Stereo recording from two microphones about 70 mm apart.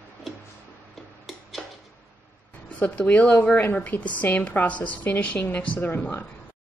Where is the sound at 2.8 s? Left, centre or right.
Left.